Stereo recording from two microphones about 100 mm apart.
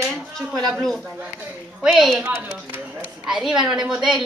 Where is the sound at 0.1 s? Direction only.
5° left (ahead or behind).